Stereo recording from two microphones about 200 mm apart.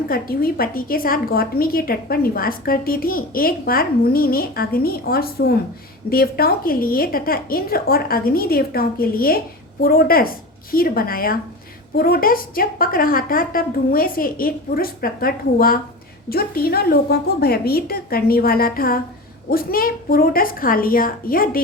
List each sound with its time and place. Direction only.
0.1 s a woman's voice: 50° left (ahead or behind)